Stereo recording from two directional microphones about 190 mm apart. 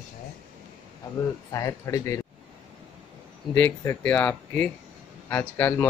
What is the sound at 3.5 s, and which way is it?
Speech, 10° left (ahead or behind).